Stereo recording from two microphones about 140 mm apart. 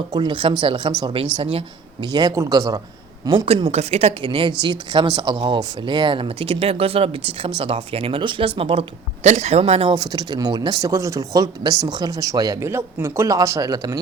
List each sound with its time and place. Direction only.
0.1 s speech: 35° right (ahead or behind)
3.2 s speech: 40° right (ahead or behind)
9.9 s speech: 30° right (ahead or behind)